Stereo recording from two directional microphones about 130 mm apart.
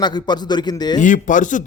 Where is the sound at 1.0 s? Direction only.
80° left.